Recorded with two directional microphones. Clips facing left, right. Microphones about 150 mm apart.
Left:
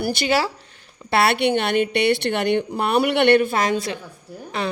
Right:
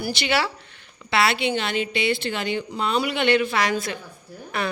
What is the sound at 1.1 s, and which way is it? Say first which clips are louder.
A woman's voice: left 4 dB; 60° left (ahead or behind).